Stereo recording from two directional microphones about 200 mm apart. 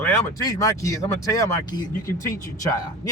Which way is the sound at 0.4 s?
15° left (ahead or behind).